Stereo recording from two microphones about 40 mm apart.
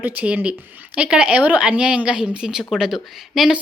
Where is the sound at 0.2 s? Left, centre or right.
Right.